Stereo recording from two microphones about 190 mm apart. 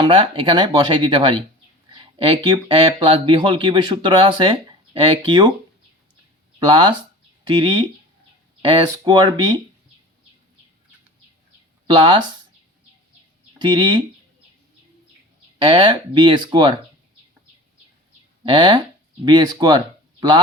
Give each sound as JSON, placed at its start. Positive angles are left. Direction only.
{"t": 0.0, "sound": "speech", "side_deg": -25}
{"t": 6.6, "sound": "speech", "side_deg": -25}
{"t": 11.9, "sound": "speech", "side_deg": -25}
{"t": 13.6, "sound": "speech", "side_deg": -25}
{"t": 15.5, "sound": "speech", "side_deg": -25}
{"t": 18.4, "sound": "speech", "side_deg": -25}